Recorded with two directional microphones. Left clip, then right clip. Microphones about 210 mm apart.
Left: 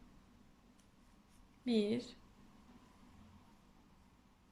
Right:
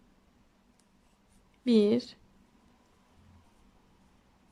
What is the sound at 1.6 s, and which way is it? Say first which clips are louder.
Speech: right 11 dB; 25° right (ahead or behind).